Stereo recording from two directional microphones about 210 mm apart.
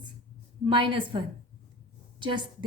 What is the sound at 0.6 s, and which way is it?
A woman's voice, 25° right (ahead or behind).